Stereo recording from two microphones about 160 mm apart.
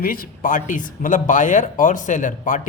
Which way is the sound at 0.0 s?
60° left (ahead or behind).